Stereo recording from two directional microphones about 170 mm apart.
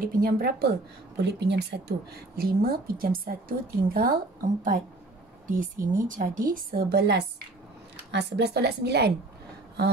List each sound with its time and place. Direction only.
0.1 s a woman's voice: 60° right (ahead or behind)
5.5 s a woman's voice: 55° right (ahead or behind); by 9.1 s 75° right (ahead or behind)